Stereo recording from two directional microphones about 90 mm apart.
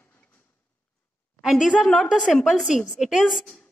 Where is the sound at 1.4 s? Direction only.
5° right (ahead or behind).